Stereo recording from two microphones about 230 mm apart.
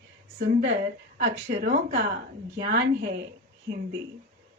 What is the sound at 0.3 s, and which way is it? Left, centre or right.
Speech, right.